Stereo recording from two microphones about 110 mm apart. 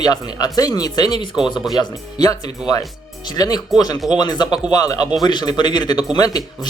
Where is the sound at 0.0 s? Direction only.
35° left (ahead or behind).